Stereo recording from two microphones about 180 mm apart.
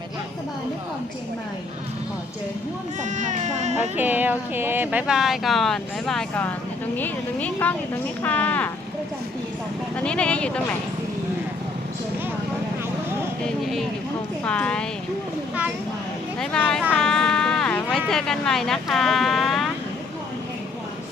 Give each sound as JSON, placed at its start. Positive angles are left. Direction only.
{"t": 3.0, "sound": "speech", "side_deg": -45}
{"t": 3.9, "sound": "a woman's voice", "side_deg": -10}
{"t": 9.9, "sound": "a woman's voice", "side_deg": 5}
{"t": 14.4, "sound": "a woman's voice", "side_deg": 5}
{"t": 16.4, "sound": "speech", "side_deg": 5}
{"t": 16.9, "sound": "music", "side_deg": 5}
{"t": 18.1, "sound": "speech", "side_deg": 5}